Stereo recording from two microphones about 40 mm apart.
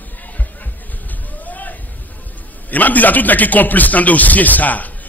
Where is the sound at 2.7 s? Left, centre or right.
Left.